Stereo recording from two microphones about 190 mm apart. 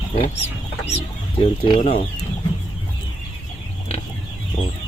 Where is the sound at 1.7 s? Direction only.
45° left (ahead or behind).